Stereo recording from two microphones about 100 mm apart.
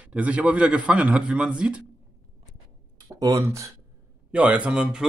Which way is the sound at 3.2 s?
35° right (ahead or behind).